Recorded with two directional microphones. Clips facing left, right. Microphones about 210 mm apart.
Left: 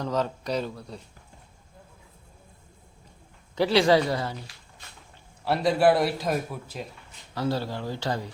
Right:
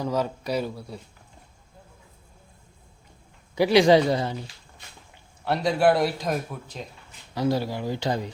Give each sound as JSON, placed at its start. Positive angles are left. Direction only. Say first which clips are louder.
{"t": 0.0, "sound": "speech", "louder": "right 1 dB", "side_deg": -10}
{"t": 3.5, "sound": "speech", "louder": "right 3 dB", "side_deg": -15}
{"t": 5.5, "sound": "a man's voice", "louder": "even", "side_deg": 0}
{"t": 7.3, "sound": "speech", "louder": "right 3 dB", "side_deg": -15}